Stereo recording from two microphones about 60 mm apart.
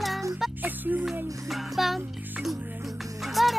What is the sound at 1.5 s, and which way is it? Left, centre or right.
Music, centre.